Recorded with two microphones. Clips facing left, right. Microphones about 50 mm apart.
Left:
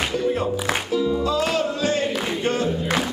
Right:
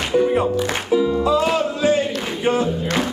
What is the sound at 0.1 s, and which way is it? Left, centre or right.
Music, centre.